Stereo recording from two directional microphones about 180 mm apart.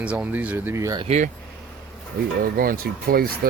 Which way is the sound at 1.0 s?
40° right (ahead or behind).